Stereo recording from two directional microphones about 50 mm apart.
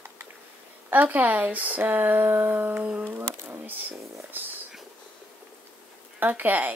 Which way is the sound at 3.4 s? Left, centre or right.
Right.